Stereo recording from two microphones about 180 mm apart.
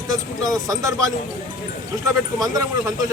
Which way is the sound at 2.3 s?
20° right (ahead or behind).